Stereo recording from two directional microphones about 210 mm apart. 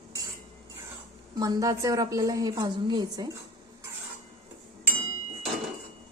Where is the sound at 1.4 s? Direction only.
15° right (ahead or behind).